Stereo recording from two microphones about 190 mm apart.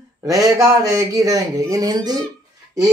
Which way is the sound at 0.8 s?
15° right (ahead or behind).